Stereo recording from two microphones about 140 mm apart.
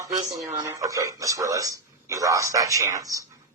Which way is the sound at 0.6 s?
20° right (ahead or behind).